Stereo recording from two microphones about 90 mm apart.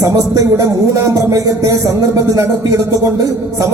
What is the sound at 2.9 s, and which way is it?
Speech, 40° right (ahead or behind).